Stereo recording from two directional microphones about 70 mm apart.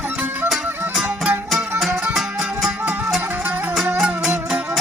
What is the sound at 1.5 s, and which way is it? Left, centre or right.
Music, centre.